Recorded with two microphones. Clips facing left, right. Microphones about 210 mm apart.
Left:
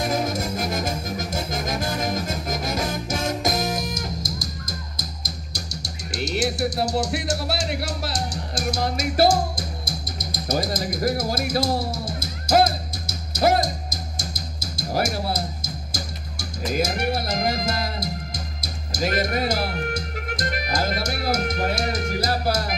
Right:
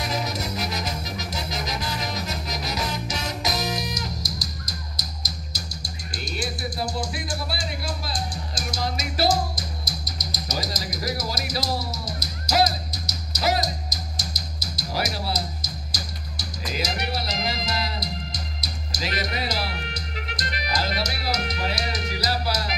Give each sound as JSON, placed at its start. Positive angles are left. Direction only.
{"t": 0.0, "sound": "music", "side_deg": 50}
{"t": 5.8, "sound": "music", "side_deg": 80}